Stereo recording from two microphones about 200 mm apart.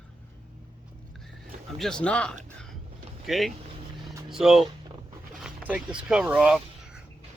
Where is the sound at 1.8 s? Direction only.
5° left (ahead or behind).